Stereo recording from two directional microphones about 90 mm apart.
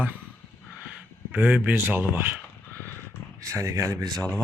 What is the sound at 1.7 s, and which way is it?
Speech, 25° right (ahead or behind).